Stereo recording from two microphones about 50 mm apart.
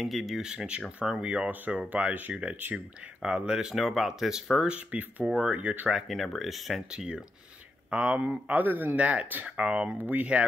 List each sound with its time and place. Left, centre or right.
0.0 s speech: centre
1.7 s speech: right
3.2 s speech: centre
3.7 s speech: centre
4.9 s speech: right
5.9 s speech: centre
7.9 s speech: right
8.2 s speech: right
9.9 s speech: right